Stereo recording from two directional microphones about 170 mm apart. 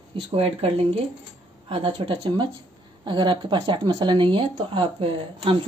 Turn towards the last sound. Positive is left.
turn(degrees=-30)  # may be behind; listen again after turning